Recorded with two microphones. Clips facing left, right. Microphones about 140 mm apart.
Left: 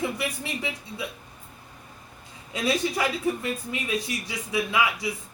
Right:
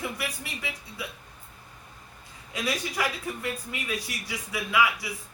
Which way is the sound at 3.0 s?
25° left (ahead or behind).